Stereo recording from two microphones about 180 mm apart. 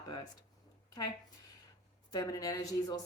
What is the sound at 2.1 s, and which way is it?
Speech, 20° left (ahead or behind).